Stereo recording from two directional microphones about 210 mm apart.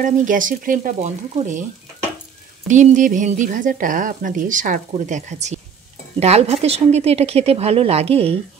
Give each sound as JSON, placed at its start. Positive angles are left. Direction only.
{"t": 0.0, "sound": "speech", "side_deg": -40}
{"t": 2.7, "sound": "speech", "side_deg": -35}